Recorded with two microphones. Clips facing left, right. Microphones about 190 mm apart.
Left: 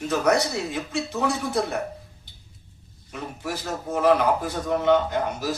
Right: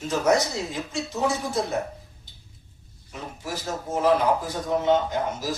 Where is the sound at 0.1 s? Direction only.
65° left (ahead or behind).